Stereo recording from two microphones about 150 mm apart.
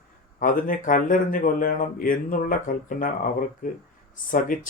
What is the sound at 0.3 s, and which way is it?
Speech, 65° left (ahead or behind).